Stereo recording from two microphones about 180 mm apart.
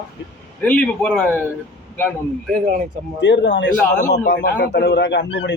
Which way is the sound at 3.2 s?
75° left (ahead or behind).